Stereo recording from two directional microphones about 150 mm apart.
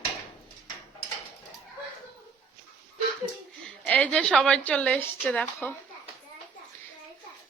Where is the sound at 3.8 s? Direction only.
10° left (ahead or behind).